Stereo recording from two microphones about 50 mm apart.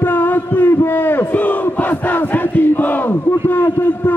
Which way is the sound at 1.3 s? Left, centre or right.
Left.